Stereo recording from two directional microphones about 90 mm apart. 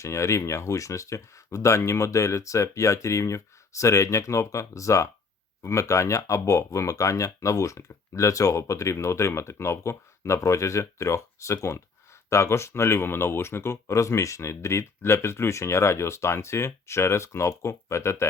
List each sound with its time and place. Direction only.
0.0 s speech: 35° left (ahead or behind)